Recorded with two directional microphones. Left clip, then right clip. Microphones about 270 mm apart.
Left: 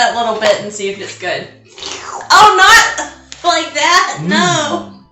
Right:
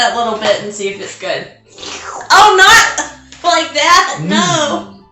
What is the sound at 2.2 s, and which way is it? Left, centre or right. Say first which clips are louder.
A woman's voice: even; centre.